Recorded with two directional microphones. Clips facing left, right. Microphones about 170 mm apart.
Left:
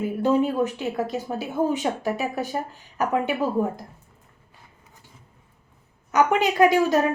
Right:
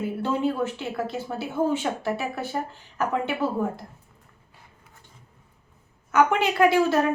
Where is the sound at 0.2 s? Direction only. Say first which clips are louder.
Left 5 dB; 15° left (ahead or behind).